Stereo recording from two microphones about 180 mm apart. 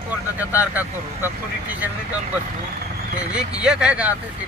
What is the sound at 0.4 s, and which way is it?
Speech, 10° right (ahead or behind).